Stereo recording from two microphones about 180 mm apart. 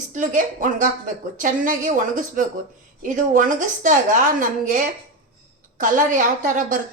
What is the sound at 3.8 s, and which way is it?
A woman's voice, 45° right (ahead or behind).